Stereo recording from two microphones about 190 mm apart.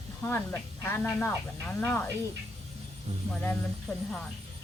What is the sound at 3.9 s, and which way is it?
Speech, centre (ahead or behind).